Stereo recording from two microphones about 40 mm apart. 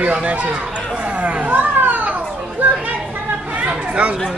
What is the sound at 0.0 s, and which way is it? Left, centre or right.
Chatter, right.